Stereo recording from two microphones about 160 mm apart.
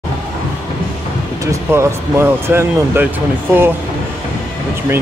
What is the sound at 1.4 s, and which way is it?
Speech, 20° right (ahead or behind).